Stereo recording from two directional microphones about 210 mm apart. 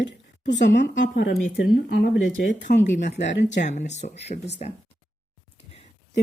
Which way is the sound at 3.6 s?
35° left (ahead or behind).